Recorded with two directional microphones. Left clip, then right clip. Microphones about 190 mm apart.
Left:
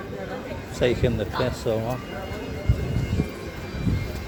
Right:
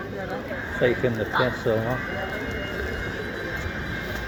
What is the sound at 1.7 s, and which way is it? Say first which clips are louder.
Speech: left 1 dB; 35° left (ahead or behind).